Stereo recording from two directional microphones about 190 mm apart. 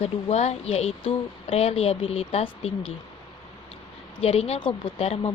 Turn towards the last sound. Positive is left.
turn(degrees=30)  # may be behind; listen again after turning